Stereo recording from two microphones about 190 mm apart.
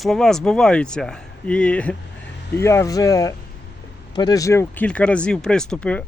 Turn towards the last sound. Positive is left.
turn(degrees=5)  # may be behind; listen again after turning